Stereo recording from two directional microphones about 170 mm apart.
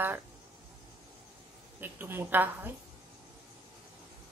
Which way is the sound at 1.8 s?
10° right (ahead or behind).